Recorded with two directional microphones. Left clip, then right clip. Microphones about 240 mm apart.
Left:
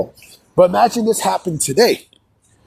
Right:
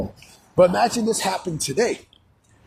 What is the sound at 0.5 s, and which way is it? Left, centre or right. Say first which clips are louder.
A man's voice: left 5 dB; centre.